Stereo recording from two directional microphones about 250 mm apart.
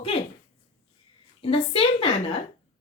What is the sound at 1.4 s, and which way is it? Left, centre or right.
Speech, left.